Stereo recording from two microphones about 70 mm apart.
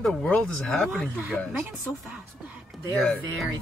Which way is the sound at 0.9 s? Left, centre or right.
Right.